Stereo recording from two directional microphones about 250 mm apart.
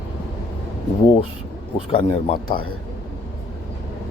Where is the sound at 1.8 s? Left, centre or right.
Left.